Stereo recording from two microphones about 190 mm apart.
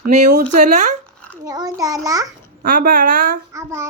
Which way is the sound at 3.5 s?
15° right (ahead or behind).